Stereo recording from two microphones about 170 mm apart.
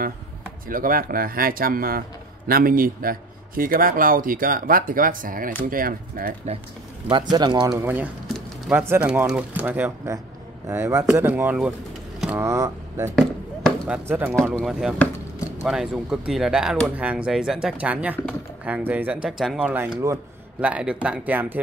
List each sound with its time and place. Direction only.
0.7 s speech: 55° right (ahead or behind)
7.1 s speech: 25° right (ahead or behind)
7.7 s speech: 10° right (ahead or behind)
8.3 s a sound: 5° right (ahead or behind)
8.8 s speech: 10° right (ahead or behind)
13.1 s basketball bounce: centre (ahead or behind)
14.5 s speech: centre (ahead or behind)